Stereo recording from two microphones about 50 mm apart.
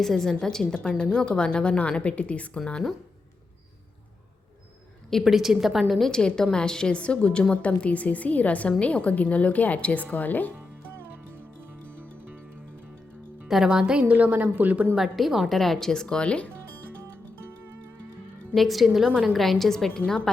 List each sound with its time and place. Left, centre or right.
0.0 s a woman's voice: centre; by 2.6 s left
5.2 s a woman's voice: centre
6.1 s a woman's voice: centre; by 10.5 s left
13.5 s a woman's voice: centre
14.0 s a woman's voice: right
14.9 s speech: centre; by 16.5 s left
18.5 s a woman's voice: centre